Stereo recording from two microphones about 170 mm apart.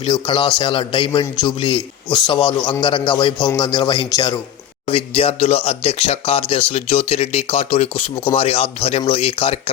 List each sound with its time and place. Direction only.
0.0 s a man's voice: 30° left (ahead or behind)